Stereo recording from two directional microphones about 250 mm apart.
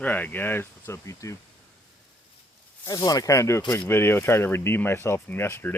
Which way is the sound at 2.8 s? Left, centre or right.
Centre.